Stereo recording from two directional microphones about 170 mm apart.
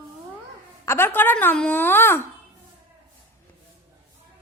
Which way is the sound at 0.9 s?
10° left (ahead or behind).